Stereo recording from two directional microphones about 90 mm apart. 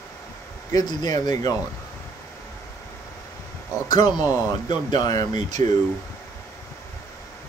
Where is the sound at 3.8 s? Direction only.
50° left (ahead or behind).